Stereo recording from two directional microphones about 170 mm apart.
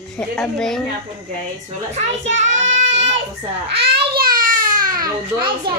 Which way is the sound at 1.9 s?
45° right (ahead or behind).